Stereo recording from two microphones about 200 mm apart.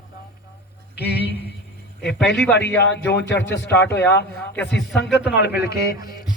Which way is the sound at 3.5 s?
60° left (ahead or behind).